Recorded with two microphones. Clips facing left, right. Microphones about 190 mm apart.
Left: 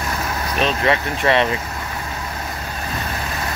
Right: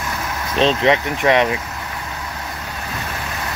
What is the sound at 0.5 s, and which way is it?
Speech, 25° right (ahead or behind).